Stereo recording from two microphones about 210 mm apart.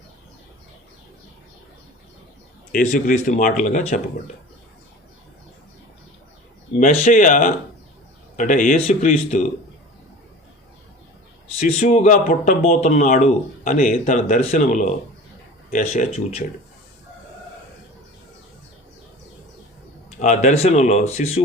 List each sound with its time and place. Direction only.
2.7 s speech: 40° left (ahead or behind)
7.0 s speech: 40° left (ahead or behind)
11.8 s speech: 30° left (ahead or behind)
20.1 s speech: 35° left (ahead or behind)